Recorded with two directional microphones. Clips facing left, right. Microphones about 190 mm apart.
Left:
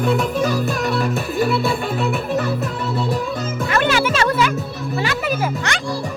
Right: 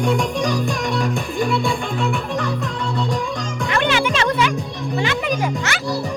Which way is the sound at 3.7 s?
40° left (ahead or behind).